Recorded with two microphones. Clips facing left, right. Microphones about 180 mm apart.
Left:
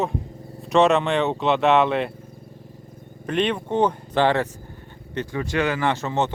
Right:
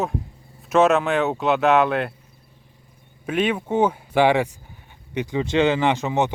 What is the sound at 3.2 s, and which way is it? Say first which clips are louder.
Speech: right 1 dB; 5° right (ahead or behind).